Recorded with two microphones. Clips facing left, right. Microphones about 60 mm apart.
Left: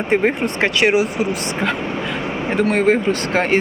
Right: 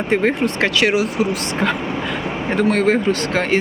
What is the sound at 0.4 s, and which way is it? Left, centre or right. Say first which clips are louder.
Speech: even; left.